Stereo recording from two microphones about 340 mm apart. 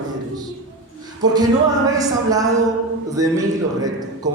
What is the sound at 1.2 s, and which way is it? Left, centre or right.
Speech, centre.